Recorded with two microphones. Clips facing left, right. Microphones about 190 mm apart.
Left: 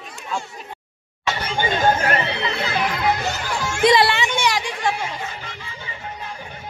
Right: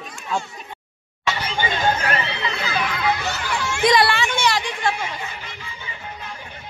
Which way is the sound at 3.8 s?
25° left (ahead or behind).